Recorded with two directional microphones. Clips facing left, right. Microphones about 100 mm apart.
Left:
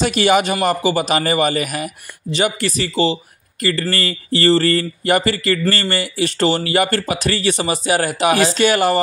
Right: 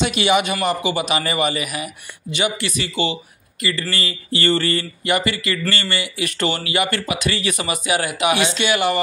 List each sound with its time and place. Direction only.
0.0 s speech: 45° left (ahead or behind)